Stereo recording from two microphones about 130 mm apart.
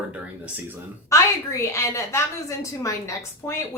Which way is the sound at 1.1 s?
20° left (ahead or behind).